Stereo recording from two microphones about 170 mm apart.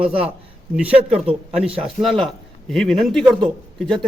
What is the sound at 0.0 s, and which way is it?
A man's voice, 35° right (ahead or behind).